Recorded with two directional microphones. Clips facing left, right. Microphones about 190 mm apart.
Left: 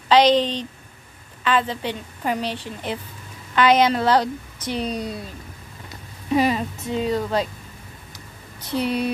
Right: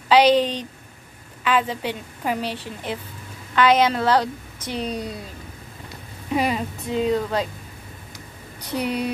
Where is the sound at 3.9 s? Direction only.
10° left (ahead or behind).